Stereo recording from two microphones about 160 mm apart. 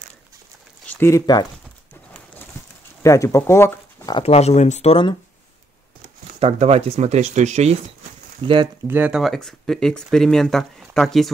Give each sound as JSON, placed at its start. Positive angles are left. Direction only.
{"t": 0.8, "sound": "a sound", "side_deg": 15}
{"t": 3.0, "sound": "speech", "side_deg": 20}
{"t": 4.2, "sound": "speech", "side_deg": 40}
{"t": 6.4, "sound": "speech", "side_deg": -40}
{"t": 8.4, "sound": "speech", "side_deg": -30}
{"t": 8.8, "sound": "speech", "side_deg": -10}
{"t": 9.2, "sound": "speech", "side_deg": 0}